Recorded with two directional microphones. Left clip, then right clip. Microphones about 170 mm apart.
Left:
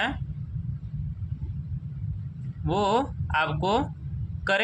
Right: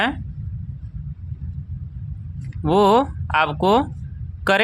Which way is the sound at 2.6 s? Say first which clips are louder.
Right 9 dB; 35° right (ahead or behind).